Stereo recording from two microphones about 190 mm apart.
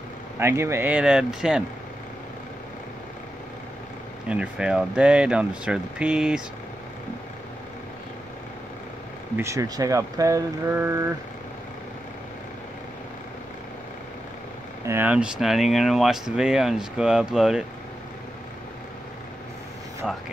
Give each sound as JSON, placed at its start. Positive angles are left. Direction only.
{"t": 0.4, "sound": "speech", "side_deg": -15}
{"t": 4.3, "sound": "speech", "side_deg": -5}
{"t": 9.4, "sound": "speech", "side_deg": -15}
{"t": 14.9, "sound": "speech", "side_deg": -10}